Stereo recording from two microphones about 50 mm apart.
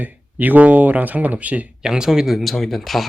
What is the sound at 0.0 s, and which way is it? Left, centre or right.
Speech, right.